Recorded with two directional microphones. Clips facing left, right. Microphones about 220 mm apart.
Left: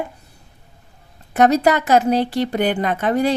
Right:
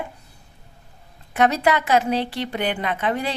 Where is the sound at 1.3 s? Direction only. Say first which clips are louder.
Left 4 dB; 40° left (ahead or behind).